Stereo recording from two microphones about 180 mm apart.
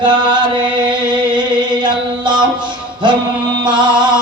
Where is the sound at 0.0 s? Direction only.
25° right (ahead or behind).